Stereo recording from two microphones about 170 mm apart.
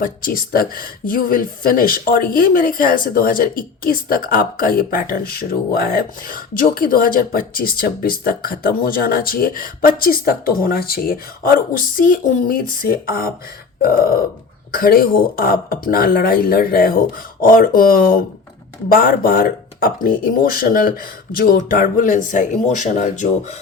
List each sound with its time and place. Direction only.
0.0 s speech: 55° left (ahead or behind)